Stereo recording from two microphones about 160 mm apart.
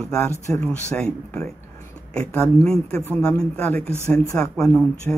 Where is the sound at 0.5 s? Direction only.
10° left (ahead or behind).